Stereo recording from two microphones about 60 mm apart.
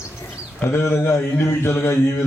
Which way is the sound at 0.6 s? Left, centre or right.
Left.